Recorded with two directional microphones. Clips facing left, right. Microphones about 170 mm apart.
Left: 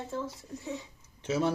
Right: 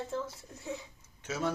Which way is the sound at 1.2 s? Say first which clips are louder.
Left 5 dB; 30° left (ahead or behind).